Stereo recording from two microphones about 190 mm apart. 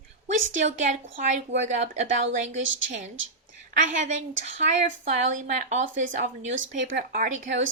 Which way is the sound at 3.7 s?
40° right (ahead or behind).